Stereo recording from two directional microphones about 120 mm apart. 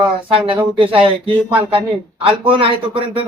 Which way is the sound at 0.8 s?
50° right (ahead or behind).